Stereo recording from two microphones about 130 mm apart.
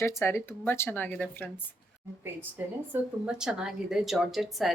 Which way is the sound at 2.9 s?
5° right (ahead or behind).